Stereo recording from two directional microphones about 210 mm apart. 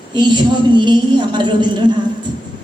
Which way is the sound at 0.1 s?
20° right (ahead or behind).